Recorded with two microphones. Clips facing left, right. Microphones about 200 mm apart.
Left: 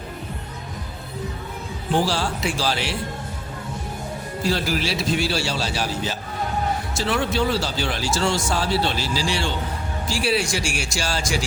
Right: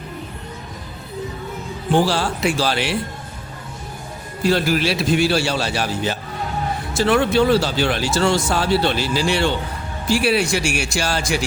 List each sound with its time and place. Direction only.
2.0 s speech: 60° right (ahead or behind)
4.4 s speech: 60° right (ahead or behind)